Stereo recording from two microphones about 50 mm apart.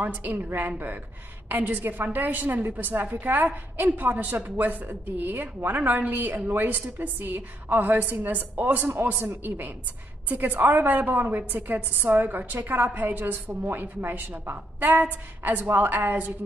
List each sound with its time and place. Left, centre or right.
0.0 s a woman's voice: right